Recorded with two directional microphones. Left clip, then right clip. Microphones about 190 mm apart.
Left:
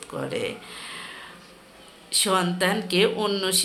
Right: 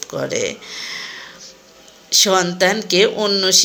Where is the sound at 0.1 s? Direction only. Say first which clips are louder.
Right 7 dB; 25° right (ahead or behind).